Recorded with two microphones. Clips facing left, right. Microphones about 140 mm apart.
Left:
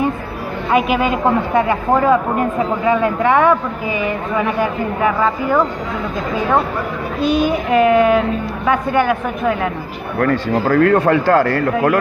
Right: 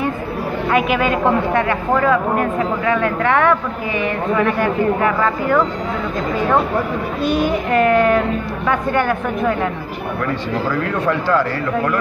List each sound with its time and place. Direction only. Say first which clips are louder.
0.7 s speech: left 2 dB; 15° left (ahead or behind)
7.7 s speech: left 2 dB; 10° left (ahead or behind)
10.2 s speech: left 6 dB; 60° left (ahead or behind)